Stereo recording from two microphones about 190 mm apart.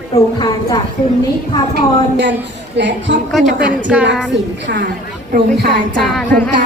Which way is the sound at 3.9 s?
5° right (ahead or behind).